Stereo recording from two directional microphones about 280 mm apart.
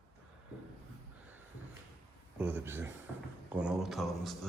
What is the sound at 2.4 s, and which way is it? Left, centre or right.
Speech, centre.